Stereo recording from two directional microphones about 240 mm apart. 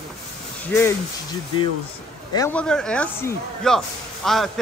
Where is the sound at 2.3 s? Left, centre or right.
Centre.